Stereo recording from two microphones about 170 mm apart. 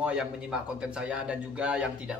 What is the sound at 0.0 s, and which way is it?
A man's voice, 5° right (ahead or behind).